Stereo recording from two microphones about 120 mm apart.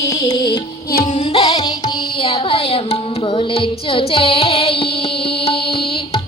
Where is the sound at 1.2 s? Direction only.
45° left (ahead or behind).